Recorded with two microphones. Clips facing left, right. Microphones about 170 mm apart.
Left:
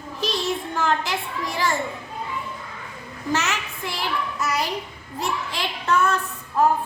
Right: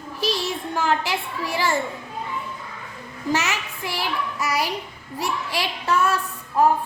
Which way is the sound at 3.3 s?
15° right (ahead or behind).